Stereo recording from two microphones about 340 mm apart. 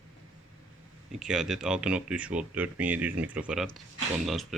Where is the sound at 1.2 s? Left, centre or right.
Centre.